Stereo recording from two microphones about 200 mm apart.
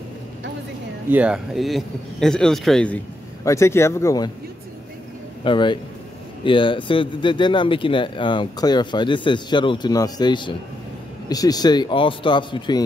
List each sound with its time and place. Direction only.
1.1 s speech: 5° right (ahead or behind)
3.4 s speech: 15° left (ahead or behind)
5.4 s speech: 25° left (ahead or behind)